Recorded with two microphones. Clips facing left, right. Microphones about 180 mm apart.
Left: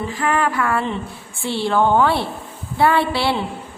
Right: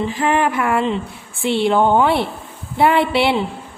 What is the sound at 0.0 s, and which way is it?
Speech, 20° right (ahead or behind).